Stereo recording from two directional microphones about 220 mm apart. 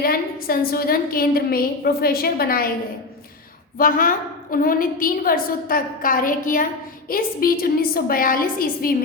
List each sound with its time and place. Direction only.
0.0 s a woman's voice: 40° left (ahead or behind)
3.8 s a woman's voice: 40° left (ahead or behind)